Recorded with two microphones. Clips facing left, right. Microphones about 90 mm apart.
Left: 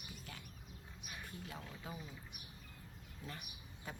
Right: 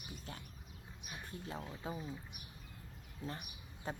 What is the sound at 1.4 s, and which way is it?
Speech, 30° right (ahead or behind).